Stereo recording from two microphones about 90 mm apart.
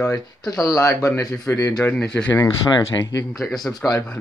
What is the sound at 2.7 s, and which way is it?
Speech, 45° left (ahead or behind).